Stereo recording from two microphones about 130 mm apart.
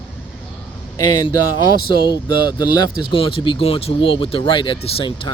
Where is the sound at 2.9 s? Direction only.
40° left (ahead or behind).